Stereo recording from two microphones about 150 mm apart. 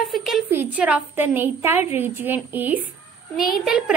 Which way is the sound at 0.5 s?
10° right (ahead or behind).